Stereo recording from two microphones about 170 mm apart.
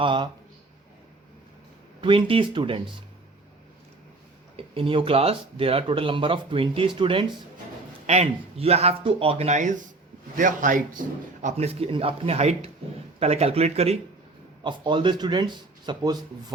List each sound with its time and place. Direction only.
0.0 s speech: 30° right (ahead or behind)
2.0 s speech: 30° right (ahead or behind)
4.5 s speech: 35° right (ahead or behind); by 11.0 s 50° right (ahead or behind)
11.4 s speech: 40° right (ahead or behind)